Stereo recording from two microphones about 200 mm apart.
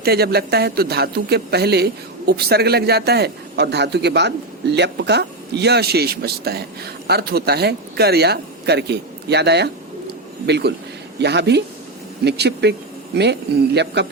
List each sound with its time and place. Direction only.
0.0 s speech: 50° right (ahead or behind)
10.1 s bird: 55° right (ahead or behind)
11.2 s a man's voice: 55° right (ahead or behind)